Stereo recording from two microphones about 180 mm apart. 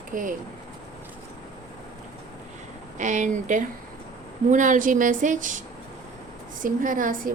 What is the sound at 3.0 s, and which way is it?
A woman's voice, 45° right (ahead or behind).